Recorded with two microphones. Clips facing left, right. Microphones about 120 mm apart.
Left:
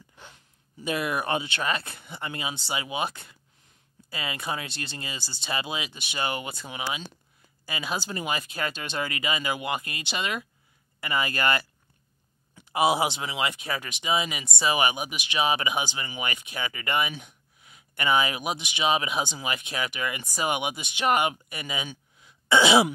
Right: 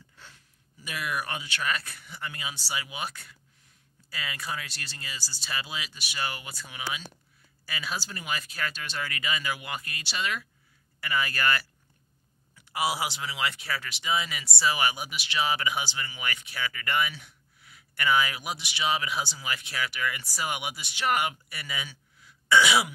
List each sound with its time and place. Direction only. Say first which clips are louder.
0.1 s speech: left 4 dB; 20° left (ahead or behind)